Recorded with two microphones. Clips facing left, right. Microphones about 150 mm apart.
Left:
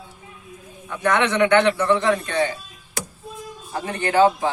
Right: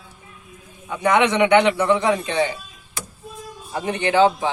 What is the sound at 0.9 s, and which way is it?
Speech, 15° right (ahead or behind).